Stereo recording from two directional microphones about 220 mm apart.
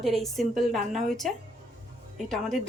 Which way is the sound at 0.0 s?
Centre (ahead or behind).